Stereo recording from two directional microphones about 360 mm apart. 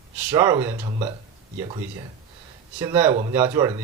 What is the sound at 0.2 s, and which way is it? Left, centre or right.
Speech, centre.